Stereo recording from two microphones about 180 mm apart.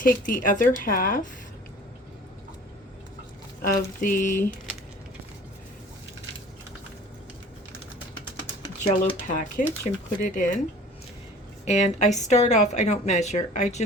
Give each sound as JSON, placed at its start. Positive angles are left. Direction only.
{"t": 0.0, "sound": "speech", "side_deg": 50}
{"t": 3.6, "sound": "speech", "side_deg": 50}
{"t": 8.9, "sound": "speech", "side_deg": 45}
{"t": 11.6, "sound": "speech", "side_deg": 40}